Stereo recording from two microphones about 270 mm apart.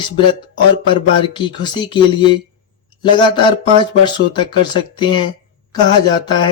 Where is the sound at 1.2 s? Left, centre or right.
Centre.